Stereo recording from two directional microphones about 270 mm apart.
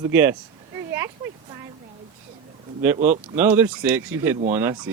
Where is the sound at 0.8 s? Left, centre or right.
Centre.